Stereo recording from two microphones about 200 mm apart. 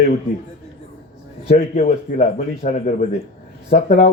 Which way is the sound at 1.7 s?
45° left (ahead or behind).